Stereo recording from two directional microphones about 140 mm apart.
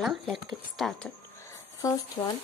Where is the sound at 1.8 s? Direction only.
25° left (ahead or behind).